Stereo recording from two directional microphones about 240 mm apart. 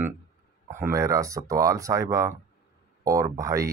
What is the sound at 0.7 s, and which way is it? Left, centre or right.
Speech, centre.